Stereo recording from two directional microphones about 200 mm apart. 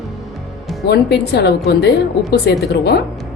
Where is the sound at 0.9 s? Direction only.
55° left (ahead or behind).